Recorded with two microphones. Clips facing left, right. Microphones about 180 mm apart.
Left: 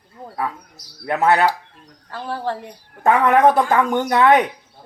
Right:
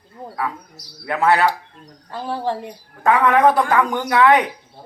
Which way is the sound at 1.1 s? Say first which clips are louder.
Left 1 dB; 20° left (ahead or behind).